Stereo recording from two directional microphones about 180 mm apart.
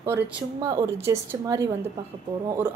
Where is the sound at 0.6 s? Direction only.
25° right (ahead or behind).